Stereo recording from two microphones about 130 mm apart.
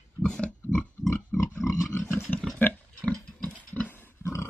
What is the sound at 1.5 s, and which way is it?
Pig, 25° left (ahead or behind).